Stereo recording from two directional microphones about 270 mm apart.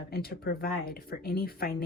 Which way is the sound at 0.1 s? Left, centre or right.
Left.